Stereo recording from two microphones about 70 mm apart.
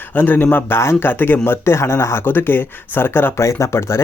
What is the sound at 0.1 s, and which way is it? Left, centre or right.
Speech, left.